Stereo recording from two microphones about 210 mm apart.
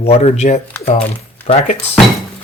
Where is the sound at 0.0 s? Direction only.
30° left (ahead or behind).